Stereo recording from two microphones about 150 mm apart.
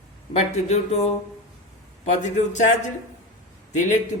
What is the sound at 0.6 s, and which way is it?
Speech, 50° left (ahead or behind).